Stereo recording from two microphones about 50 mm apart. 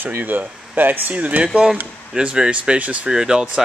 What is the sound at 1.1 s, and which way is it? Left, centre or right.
Speech, right.